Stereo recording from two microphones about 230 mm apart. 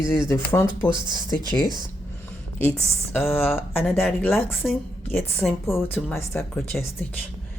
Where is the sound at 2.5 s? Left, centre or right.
Centre.